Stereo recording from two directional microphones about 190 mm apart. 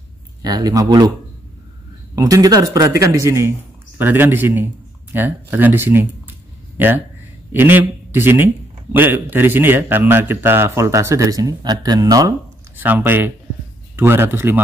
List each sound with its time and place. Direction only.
0.4 s speech: 20° right (ahead or behind)
2.1 s a man's voice: 20° right (ahead or behind)
7.5 s a man's voice: 10° right (ahead or behind)